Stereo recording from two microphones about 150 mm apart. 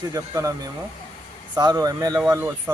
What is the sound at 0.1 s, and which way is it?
Speech, 20° right (ahead or behind).